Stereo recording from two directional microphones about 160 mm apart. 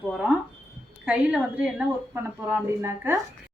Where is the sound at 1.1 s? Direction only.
5° right (ahead or behind).